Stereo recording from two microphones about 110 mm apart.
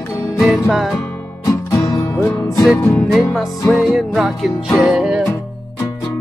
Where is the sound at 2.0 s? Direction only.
20° left (ahead or behind).